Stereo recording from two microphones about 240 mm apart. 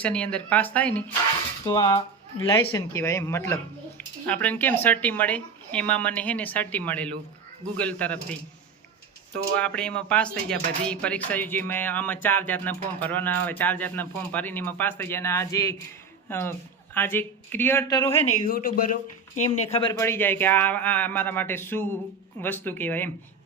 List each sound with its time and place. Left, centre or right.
0.0 s speech: centre
1.6 s speech: centre
9.6 s speech: centre
18.3 s a man's voice: left
19.4 s speech: left; by 23.1 s centre